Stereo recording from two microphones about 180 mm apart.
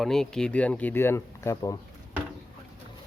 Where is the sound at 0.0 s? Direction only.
Centre (ahead or behind); by 1.8 s 15° left (ahead or behind).